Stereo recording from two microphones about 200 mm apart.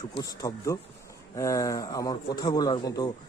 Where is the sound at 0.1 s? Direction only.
20° left (ahead or behind).